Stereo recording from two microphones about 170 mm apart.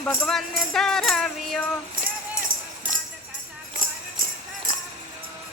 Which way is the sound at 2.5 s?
55° right (ahead or behind).